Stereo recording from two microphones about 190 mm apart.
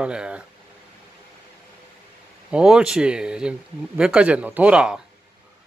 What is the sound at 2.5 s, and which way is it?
A man's voice, 5° right (ahead or behind).